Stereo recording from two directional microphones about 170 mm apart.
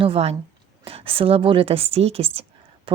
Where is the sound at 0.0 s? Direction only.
35° right (ahead or behind).